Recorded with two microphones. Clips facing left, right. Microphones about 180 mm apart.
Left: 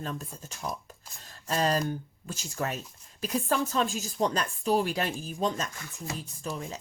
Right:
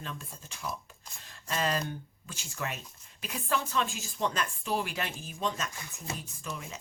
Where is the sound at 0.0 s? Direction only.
40° left (ahead or behind).